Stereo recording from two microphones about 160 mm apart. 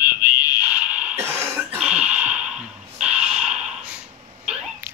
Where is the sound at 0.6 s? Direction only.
10° right (ahead or behind).